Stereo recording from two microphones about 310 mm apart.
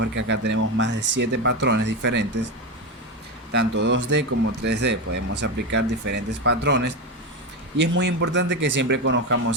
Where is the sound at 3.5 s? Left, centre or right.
Right.